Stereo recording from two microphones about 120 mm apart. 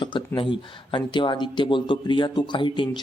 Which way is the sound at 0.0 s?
45° left (ahead or behind).